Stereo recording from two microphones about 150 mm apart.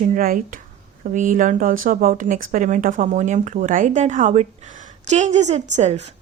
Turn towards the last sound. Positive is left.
turn(degrees=-50)  # may be behind; listen again after turning